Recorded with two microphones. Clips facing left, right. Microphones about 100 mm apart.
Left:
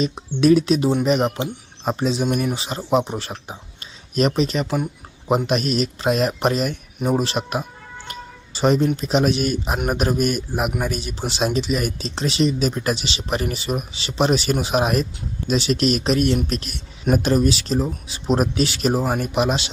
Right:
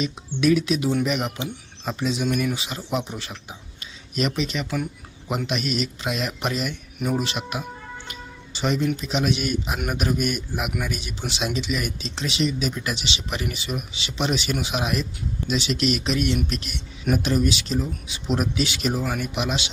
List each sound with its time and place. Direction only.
0.0 s speech: 35° left (ahead or behind)